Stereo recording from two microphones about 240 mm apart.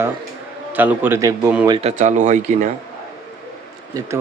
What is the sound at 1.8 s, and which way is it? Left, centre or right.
Speech, right.